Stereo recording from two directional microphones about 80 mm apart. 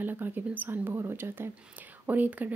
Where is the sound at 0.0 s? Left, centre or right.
Right.